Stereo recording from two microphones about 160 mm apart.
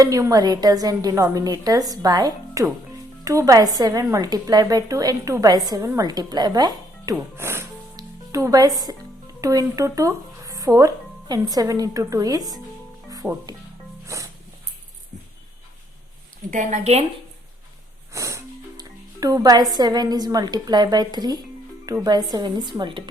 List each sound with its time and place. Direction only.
0.0 s a woman's voice: 20° right (ahead or behind)
13.2 s speech: 5° right (ahead or behind)
16.5 s a woman's voice: 50° right (ahead or behind)
18.1 s a woman's voice: 20° right (ahead or behind)